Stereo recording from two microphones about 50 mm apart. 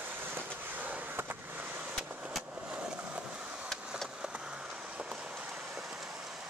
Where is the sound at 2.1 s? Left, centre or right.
Right.